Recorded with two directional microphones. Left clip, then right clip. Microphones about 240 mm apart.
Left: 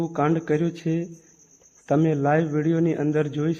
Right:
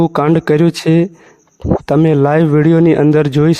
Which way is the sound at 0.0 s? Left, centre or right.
Right.